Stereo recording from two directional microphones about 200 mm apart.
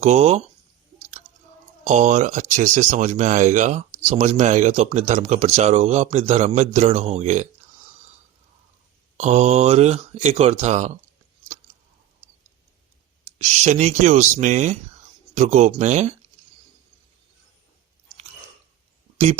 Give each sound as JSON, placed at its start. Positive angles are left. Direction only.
{"t": 0.0, "sound": "speech", "side_deg": -35}
{"t": 1.8, "sound": "speech", "side_deg": -35}
{"t": 9.1, "sound": "speech", "side_deg": -35}
{"t": 13.4, "sound": "speech", "side_deg": -35}